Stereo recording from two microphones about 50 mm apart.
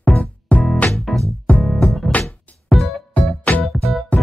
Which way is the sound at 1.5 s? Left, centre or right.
Left.